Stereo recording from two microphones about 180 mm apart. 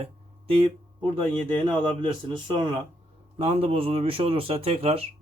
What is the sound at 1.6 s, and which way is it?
A man's voice, 25° right (ahead or behind).